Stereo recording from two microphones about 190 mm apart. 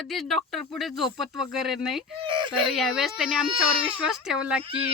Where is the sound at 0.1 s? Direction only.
Centre (ahead or behind).